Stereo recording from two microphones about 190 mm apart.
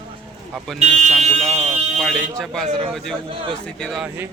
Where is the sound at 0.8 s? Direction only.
35° right (ahead or behind).